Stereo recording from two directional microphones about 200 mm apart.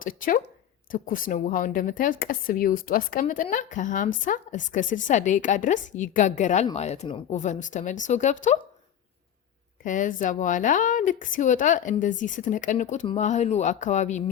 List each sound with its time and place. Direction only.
0.0 s a woman's voice: 45° left (ahead or behind)
9.8 s speech: 40° left (ahead or behind)